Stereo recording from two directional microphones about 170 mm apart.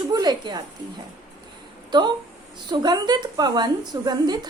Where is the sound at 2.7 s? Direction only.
25° right (ahead or behind).